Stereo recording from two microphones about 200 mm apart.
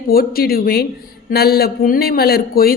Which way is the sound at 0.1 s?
50° left (ahead or behind).